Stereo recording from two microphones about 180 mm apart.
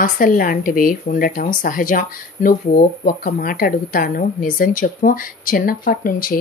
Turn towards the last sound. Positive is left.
turn(degrees=50)  # may be behind; listen again after turning